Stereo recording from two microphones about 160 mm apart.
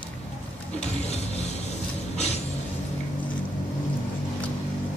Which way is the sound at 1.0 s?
40° left (ahead or behind).